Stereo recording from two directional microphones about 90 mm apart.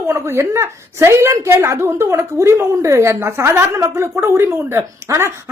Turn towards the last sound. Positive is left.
turn(degrees=-30)  # may be behind; listen again after turning